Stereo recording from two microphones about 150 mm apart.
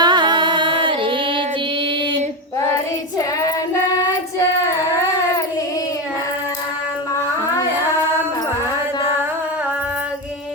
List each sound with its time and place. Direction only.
0.0 s music: 30° right (ahead or behind)
2.7 s child singing: 20° left (ahead or behind)